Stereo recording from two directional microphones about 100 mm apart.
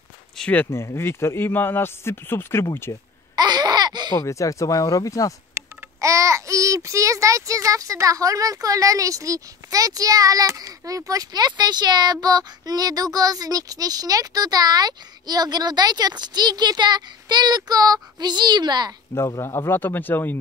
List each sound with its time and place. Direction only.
0.4 s speech: 15° left (ahead or behind)
0.7 s speech: 25° left (ahead or behind)
3.3 s laughter: 45° right (ahead or behind)
4.2 s speech: 35° left (ahead or behind)
5.5 s a child's voice: 30° right (ahead or behind)
19.1 s speech: 30° left (ahead or behind)